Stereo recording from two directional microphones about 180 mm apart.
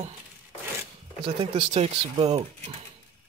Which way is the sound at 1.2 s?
30° right (ahead or behind).